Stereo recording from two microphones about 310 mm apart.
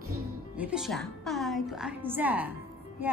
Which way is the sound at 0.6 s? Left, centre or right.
Centre.